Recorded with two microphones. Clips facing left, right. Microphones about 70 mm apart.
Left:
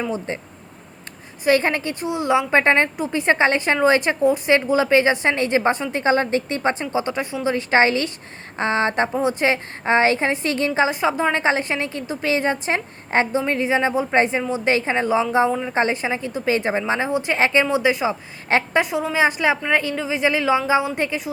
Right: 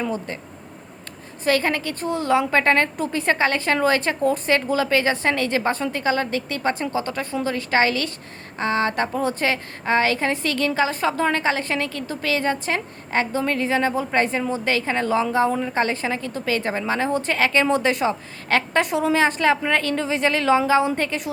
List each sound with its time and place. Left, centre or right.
0.3 s a woman's voice: left
1.5 s a woman's voice: left
2.0 s a woman's voice: centre
17.7 s a woman's voice: centre
18.4 s a woman's voice: left
18.8 s a woman's voice: centre
19.2 s a woman's voice: centre